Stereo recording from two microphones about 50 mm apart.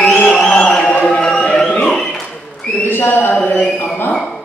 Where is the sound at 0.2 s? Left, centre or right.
Left.